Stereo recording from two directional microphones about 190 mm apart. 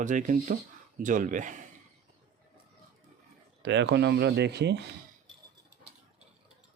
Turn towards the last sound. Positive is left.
turn(degrees=-60)  # may be behind; listen again after turning